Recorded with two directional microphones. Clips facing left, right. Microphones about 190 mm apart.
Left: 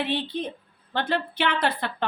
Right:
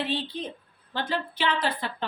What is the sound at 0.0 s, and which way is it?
A woman's voice, 60° left (ahead or behind).